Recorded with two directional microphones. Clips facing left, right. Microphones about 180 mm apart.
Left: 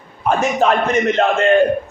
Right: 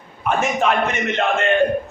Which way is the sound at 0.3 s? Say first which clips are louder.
Left 3 dB; 35° left (ahead or behind).